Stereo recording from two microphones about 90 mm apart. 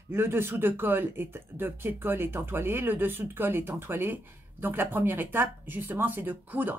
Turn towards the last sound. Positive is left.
turn(degrees=-25)  # may be behind; listen again after turning